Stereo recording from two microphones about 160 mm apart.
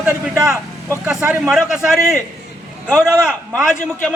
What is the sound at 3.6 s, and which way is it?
Speech, 5° right (ahead or behind).